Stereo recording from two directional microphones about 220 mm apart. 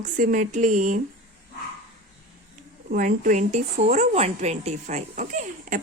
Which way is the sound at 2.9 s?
35° right (ahead or behind).